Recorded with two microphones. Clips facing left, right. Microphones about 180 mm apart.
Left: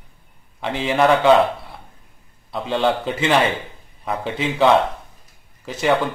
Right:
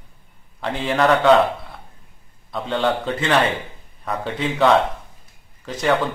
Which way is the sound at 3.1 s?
15° left (ahead or behind).